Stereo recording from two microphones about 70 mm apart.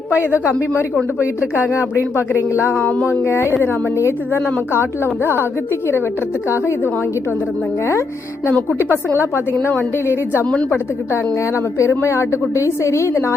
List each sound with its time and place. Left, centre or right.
0.1 s speech: right
1.5 s speech: left
2.8 s speech: left
3.1 s speech: left
6.5 s speech: left
9.1 s speech: left
10.7 s a woman's voice: left